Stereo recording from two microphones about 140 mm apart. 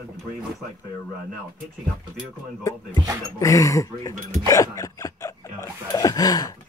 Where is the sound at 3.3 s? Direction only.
25° left (ahead or behind).